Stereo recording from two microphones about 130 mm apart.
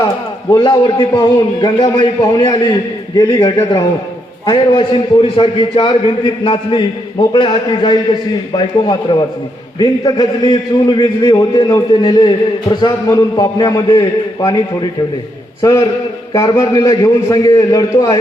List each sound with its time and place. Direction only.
1.1 s a man's voice: 35° left (ahead or behind)